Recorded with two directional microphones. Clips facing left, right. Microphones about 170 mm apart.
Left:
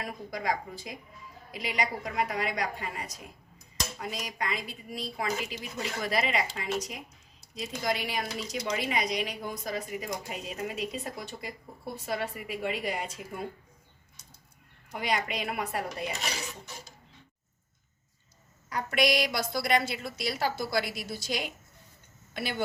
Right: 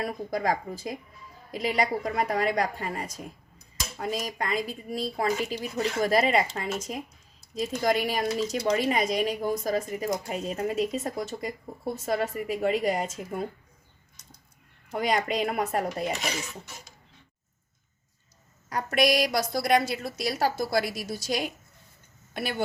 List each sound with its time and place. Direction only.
0.0 s speech: 40° right (ahead or behind)
14.9 s speech: 40° right (ahead or behind)
18.7 s speech: 45° right (ahead or behind)